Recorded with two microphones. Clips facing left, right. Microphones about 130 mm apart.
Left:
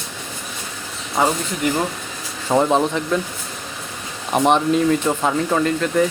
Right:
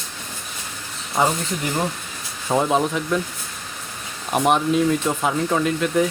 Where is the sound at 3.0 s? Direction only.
5° right (ahead or behind).